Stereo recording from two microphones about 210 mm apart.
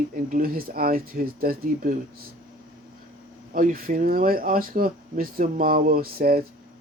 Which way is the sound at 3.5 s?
40° right (ahead or behind).